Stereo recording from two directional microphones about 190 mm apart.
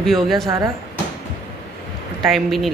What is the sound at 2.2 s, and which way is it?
Speech, centre (ahead or behind).